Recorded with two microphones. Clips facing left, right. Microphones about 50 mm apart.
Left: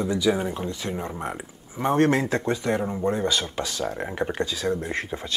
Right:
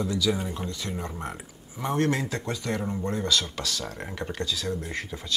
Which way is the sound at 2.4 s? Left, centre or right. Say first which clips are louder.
Left 6 dB; left.